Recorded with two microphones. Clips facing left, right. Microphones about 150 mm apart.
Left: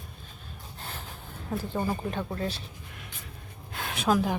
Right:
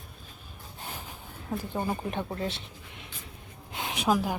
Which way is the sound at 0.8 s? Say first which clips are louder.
Right 1 dB; 15° right (ahead or behind).